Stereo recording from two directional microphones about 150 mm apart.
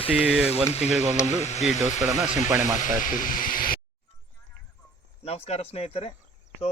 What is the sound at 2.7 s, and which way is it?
Speech, 60° left (ahead or behind).